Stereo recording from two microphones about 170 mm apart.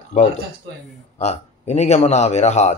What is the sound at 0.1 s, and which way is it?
Speech, 40° left (ahead or behind).